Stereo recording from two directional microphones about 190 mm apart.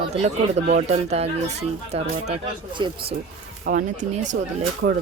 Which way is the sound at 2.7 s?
25° right (ahead or behind).